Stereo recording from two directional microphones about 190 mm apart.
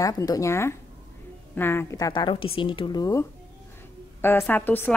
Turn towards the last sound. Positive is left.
turn(degrees=10)  # may be behind; listen again after turning